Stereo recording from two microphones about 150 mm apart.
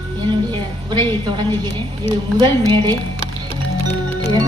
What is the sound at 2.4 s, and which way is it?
Speech, 30° right (ahead or behind).